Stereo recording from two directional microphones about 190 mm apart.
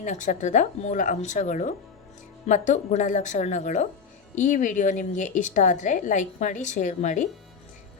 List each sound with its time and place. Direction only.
0.0 s a woman's voice: 40° left (ahead or behind)